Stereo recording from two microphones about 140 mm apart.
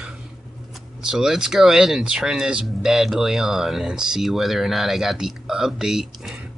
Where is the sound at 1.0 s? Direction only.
5° right (ahead or behind).